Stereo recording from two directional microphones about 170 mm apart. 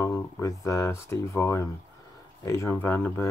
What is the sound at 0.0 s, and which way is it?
Speech, 20° left (ahead or behind).